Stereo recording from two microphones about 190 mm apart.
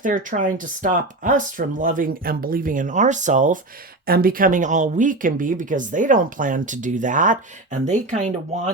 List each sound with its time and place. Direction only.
0.0 s speech: 45° right (ahead or behind)